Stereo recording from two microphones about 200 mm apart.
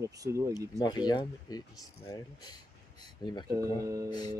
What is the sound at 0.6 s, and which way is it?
Speech, 20° left (ahead or behind).